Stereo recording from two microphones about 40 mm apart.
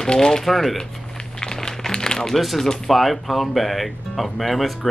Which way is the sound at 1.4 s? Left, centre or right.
Centre.